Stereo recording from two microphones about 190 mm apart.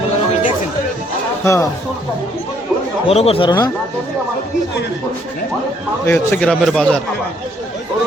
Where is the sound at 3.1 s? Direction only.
30° left (ahead or behind).